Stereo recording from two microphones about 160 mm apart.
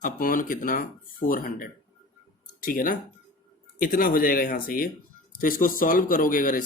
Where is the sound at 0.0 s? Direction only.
60° left (ahead or behind).